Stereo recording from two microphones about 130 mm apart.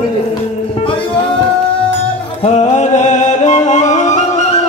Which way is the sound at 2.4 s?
60° left (ahead or behind).